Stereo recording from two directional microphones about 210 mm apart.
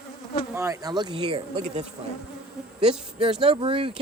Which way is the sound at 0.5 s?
15° right (ahead or behind).